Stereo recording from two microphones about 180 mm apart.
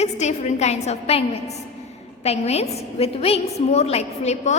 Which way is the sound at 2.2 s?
35° left (ahead or behind).